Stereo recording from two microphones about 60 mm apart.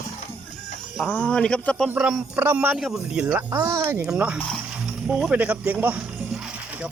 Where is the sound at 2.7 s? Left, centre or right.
Centre.